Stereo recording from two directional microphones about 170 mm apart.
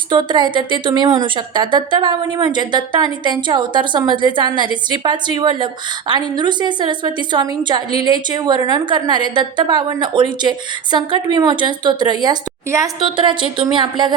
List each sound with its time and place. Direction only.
0.1 s a woman's voice: 25° right (ahead or behind)